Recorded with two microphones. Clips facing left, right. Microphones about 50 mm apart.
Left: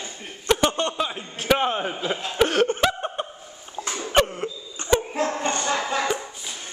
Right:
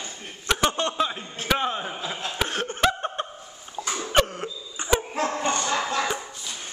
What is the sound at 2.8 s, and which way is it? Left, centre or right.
Chuckle, centre.